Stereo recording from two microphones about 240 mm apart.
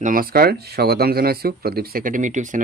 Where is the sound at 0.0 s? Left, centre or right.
Right.